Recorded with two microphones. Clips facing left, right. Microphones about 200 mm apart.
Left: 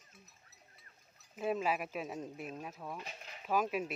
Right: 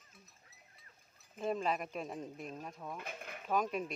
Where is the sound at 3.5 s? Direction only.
5° left (ahead or behind).